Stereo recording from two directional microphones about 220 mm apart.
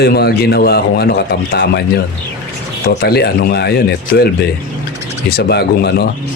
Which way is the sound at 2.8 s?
45° left (ahead or behind).